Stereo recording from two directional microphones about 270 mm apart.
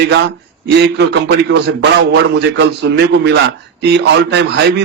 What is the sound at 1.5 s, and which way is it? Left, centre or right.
A man's voice, right.